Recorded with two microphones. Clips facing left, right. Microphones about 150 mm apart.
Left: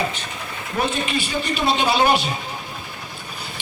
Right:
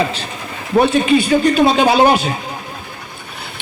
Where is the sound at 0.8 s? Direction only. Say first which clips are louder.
Right 11 dB; 70° right (ahead or behind).